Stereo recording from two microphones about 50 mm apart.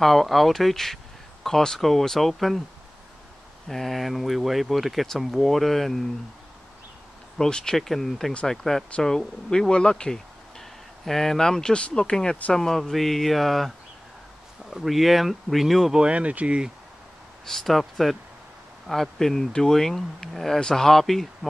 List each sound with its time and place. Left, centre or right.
0.0 s speech: centre
3.6 s speech: centre
7.3 s speech: centre
15.9 s speech: right
17.5 s speech: centre